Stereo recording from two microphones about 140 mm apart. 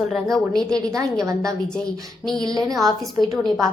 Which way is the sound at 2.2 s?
5° left (ahead or behind).